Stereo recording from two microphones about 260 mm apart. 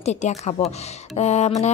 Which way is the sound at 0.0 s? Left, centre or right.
Left.